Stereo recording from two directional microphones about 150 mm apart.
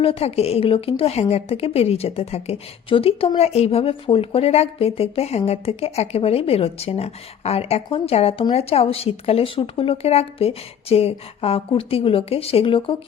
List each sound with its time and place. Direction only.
0.0 s a woman's voice: 40° left (ahead or behind)